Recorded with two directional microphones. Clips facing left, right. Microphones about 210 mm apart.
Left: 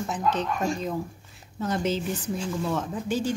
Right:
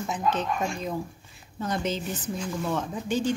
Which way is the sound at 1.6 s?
5° left (ahead or behind).